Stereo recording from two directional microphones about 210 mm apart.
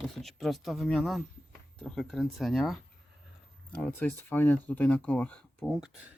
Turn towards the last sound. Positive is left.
turn(degrees=0)  # may be behind; listen again after turning